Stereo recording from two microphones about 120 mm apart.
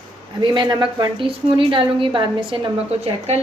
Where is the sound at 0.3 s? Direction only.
40° right (ahead or behind).